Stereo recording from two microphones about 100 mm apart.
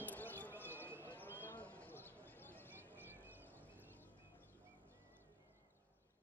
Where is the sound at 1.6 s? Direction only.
20° left (ahead or behind).